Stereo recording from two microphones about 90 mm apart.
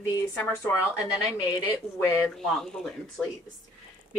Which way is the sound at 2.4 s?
5° left (ahead or behind).